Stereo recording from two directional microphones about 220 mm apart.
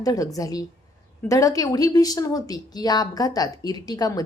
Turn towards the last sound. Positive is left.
turn(degrees=15)  # may be behind; listen again after turning